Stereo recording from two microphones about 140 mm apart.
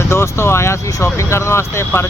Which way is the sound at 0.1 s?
20° left (ahead or behind).